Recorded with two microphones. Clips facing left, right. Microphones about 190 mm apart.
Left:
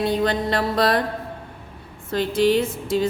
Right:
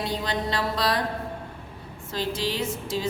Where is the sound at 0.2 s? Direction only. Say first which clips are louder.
Left 6 dB; 55° left (ahead or behind).